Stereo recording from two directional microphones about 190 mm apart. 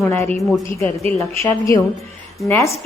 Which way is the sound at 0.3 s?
Centre (ahead or behind).